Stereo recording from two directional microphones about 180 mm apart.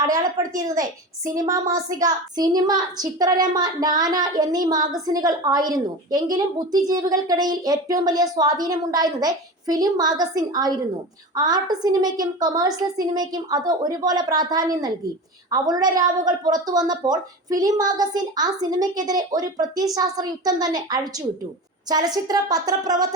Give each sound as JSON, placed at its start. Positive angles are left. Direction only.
{"t": 0.0, "sound": "a woman's voice", "side_deg": -20}